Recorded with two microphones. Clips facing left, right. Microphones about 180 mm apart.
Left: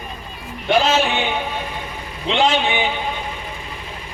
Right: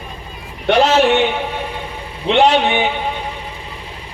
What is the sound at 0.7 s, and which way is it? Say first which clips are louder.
Speech: right 5 dB; 70° right (ahead or behind).